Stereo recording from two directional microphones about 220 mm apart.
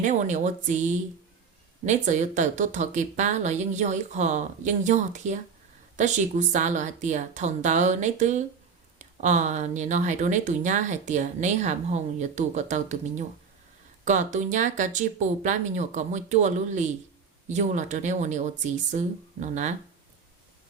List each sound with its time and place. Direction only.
0.0 s speech: 35° right (ahead or behind)